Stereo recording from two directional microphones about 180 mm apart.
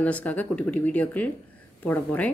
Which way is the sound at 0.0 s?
10° left (ahead or behind).